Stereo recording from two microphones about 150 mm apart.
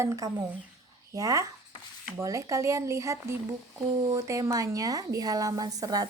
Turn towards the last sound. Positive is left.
turn(degrees=-25)  # may be behind; listen again after turning